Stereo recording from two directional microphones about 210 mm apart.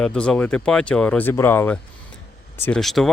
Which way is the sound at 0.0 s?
5° left (ahead or behind).